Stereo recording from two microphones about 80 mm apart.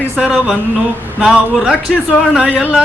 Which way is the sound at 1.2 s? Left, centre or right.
Centre.